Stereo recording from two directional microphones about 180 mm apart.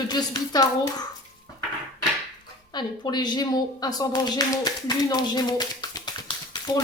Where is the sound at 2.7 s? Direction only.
25° left (ahead or behind).